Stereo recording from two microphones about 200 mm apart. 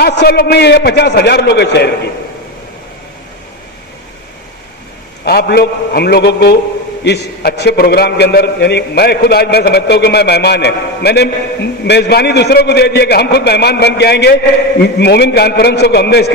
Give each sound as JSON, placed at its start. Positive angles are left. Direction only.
{"t": 0.0, "sound": "a man's voice", "side_deg": 55}
{"t": 5.2, "sound": "a man's voice", "side_deg": 50}